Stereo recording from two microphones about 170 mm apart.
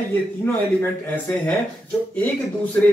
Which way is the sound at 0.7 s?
10° left (ahead or behind).